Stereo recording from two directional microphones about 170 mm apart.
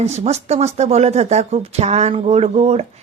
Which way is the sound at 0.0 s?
40° right (ahead or behind).